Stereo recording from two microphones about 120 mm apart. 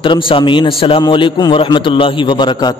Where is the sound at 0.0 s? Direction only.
45° left (ahead or behind).